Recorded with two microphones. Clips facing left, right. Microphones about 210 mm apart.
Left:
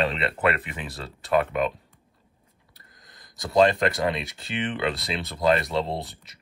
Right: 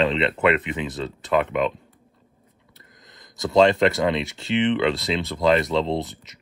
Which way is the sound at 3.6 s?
25° right (ahead or behind).